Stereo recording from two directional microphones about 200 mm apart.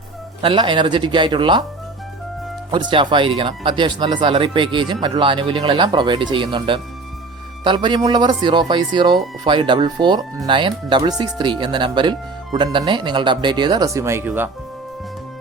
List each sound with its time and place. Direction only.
0.4 s speech: 25° right (ahead or behind)
2.7 s speech: 25° right (ahead or behind)